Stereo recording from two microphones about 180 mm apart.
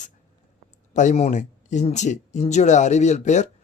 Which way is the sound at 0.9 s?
40° left (ahead or behind).